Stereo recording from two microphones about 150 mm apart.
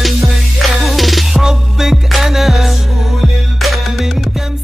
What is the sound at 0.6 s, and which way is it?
Music, centre (ahead or behind).